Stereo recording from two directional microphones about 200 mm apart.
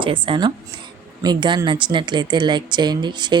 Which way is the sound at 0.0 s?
25° right (ahead or behind).